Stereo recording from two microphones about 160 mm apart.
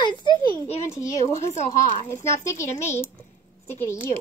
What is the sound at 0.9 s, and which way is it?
Music, 20° left (ahead or behind).